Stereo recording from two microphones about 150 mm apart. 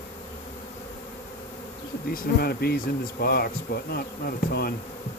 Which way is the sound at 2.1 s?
90° left.